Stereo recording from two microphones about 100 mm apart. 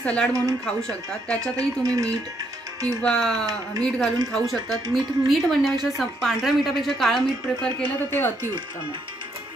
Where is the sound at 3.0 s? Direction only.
10° left (ahead or behind).